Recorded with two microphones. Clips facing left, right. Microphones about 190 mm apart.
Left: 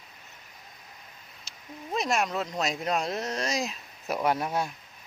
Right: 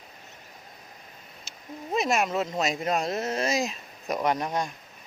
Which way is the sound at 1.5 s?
Centre (ahead or behind).